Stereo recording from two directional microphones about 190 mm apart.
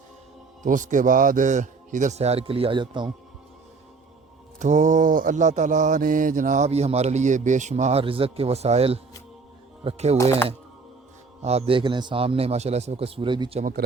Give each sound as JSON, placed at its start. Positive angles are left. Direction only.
{"t": 0.6, "sound": "mantra", "side_deg": -40}
{"t": 4.6, "sound": "mantra", "side_deg": -40}
{"t": 11.4, "sound": "mantra", "side_deg": -30}
{"t": 13.6, "sound": "speech", "side_deg": -45}